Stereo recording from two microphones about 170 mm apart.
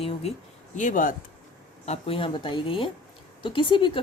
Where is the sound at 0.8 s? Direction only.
50° left (ahead or behind).